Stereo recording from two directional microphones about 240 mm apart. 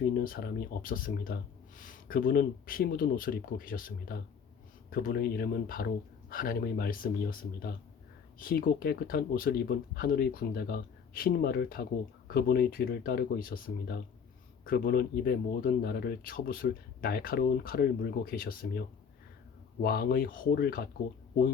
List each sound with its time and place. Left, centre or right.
0.2 s speech: left